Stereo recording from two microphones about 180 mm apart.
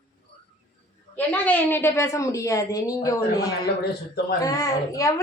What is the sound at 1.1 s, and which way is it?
Speech, 10° left (ahead or behind).